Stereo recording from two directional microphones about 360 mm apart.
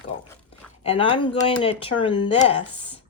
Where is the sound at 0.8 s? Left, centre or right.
Centre.